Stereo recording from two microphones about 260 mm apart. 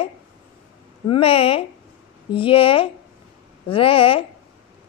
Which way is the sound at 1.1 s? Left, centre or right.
Left.